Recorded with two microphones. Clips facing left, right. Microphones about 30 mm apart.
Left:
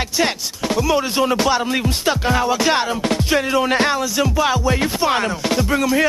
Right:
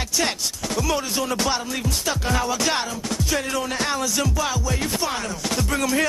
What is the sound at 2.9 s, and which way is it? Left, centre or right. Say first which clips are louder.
Music: left 8 dB; left.